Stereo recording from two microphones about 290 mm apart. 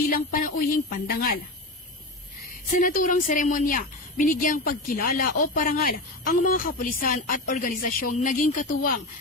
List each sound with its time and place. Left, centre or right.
0.0 s speech: left
2.8 s a woman's voice: left